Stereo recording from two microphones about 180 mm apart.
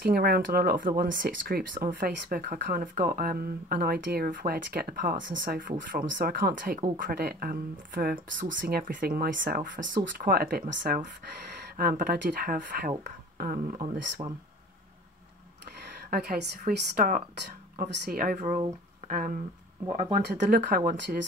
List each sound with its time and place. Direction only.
0.0 s speech: 55° right (ahead or behind)
14.2 s speech: 30° right (ahead or behind)
16.1 s speech: 60° right (ahead or behind)
18.2 s speech: 45° right (ahead or behind)
19.9 s speech: 30° right (ahead or behind)
20.2 s speech: 65° right (ahead or behind)